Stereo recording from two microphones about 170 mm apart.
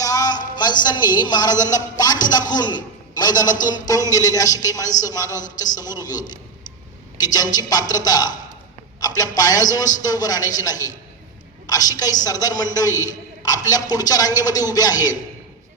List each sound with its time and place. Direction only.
0.0 s a sound: 20° left (ahead or behind)
0.5 s a man's voice: 25° left (ahead or behind)
7.5 s a man's voice: 20° left (ahead or behind)